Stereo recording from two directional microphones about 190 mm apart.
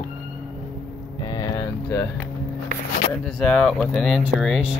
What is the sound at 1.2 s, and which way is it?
Speech, 20° left (ahead or behind).